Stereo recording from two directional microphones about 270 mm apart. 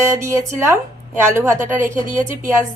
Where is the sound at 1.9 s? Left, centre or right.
Right.